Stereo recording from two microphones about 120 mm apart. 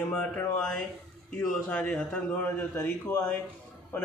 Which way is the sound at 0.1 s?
10° left (ahead or behind).